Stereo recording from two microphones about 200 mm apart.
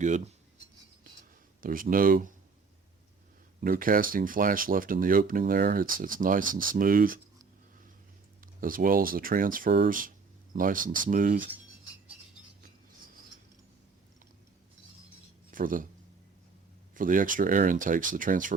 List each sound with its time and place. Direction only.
0.0 s speech: 35° right (ahead or behind)
1.6 s speech: 45° right (ahead or behind)
3.6 s speech: 45° right (ahead or behind)
8.6 s speech: 45° right (ahead or behind)
15.4 s speech: 45° right (ahead or behind)
16.9 s speech: 40° right (ahead or behind)